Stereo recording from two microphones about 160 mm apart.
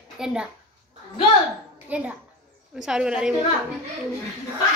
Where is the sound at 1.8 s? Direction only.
10° right (ahead or behind).